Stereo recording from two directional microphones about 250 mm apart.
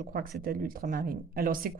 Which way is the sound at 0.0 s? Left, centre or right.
Right.